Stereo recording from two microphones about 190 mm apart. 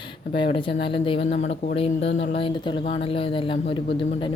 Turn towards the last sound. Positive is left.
turn(degrees=30)  # may be behind; listen again after turning